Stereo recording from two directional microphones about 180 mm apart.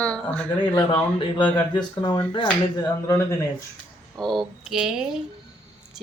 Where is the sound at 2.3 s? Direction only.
25° left (ahead or behind).